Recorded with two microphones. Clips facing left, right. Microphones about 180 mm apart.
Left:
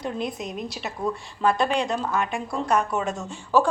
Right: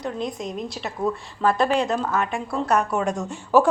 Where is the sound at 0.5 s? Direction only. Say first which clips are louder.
Right 2 dB; 5° left (ahead or behind).